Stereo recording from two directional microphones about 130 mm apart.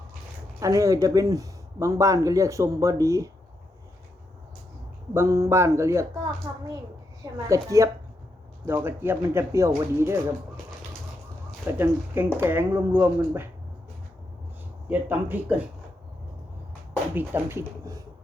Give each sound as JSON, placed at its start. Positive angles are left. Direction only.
{"t": 0.6, "sound": "speech", "side_deg": -25}
{"t": 5.1, "sound": "speech", "side_deg": -25}
{"t": 11.8, "sound": "speech", "side_deg": -15}
{"t": 14.8, "sound": "speech", "side_deg": -10}
{"t": 17.2, "sound": "speech", "side_deg": -15}